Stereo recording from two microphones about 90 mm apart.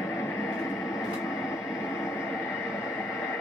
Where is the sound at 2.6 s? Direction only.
35° left (ahead or behind).